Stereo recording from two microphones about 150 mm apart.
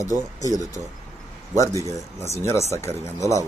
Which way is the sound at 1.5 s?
20° left (ahead or behind).